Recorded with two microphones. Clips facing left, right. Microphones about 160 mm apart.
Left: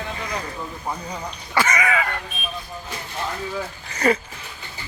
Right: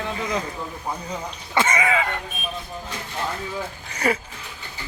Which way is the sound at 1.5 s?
25° right (ahead or behind).